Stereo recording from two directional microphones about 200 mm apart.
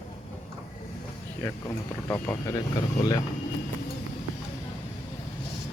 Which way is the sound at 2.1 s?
15° left (ahead or behind).